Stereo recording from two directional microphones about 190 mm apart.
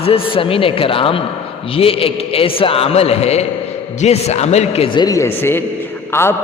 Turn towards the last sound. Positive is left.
turn(degrees=10)  # may be behind; listen again after turning